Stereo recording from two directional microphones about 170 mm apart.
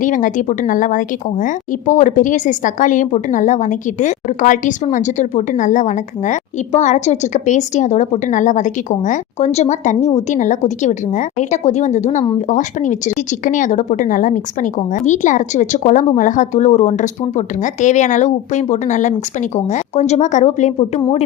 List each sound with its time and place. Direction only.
0.0 s a woman's voice: 50° left (ahead or behind)